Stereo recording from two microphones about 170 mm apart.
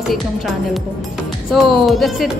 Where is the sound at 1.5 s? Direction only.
Centre (ahead or behind).